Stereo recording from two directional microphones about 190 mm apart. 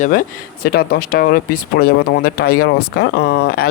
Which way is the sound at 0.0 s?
45° left (ahead or behind).